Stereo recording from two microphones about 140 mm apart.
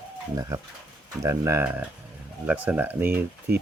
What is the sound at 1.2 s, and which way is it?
Speech, 20° right (ahead or behind).